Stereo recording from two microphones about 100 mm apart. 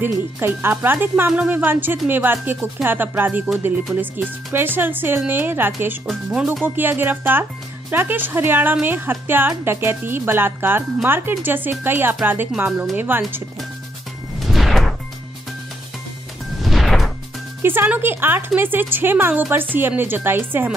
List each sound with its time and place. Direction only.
0.0 s speech: 20° right (ahead or behind)
6.0 s speech: 5° right (ahead or behind)
6.6 s speech: 20° right (ahead or behind)
14.4 s music: centre (ahead or behind)
16.6 s music: centre (ahead or behind)
17.6 s speech: 20° right (ahead or behind)